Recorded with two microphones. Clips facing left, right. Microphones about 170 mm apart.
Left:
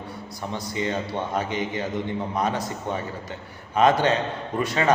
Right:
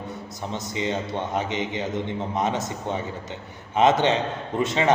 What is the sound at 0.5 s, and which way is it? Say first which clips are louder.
A man's voice: even; 20° right (ahead or behind).